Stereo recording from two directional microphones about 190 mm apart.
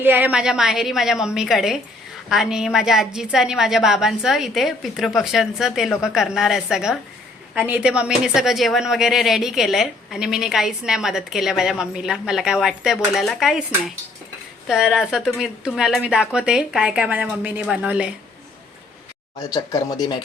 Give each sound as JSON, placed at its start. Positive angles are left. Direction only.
{"t": 0.0, "sound": "speech", "side_deg": -10}
{"t": 14.7, "sound": "speech", "side_deg": 0}
{"t": 19.5, "sound": "speech", "side_deg": 20}